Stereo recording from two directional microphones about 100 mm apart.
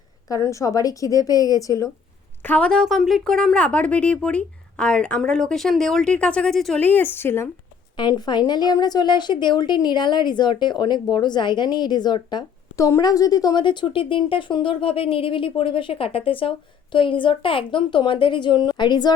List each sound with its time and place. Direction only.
0.3 s speech: 30° left (ahead or behind)
2.4 s speech: 15° left (ahead or behind)
6.7 s a woman's voice: 20° left (ahead or behind)
7.9 s a woman's voice: 45° left (ahead or behind)
12.7 s a woman's voice: 35° left (ahead or behind)